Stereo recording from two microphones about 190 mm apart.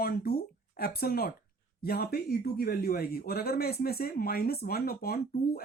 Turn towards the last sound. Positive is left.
turn(degrees=55)  # may be behind; listen again after turning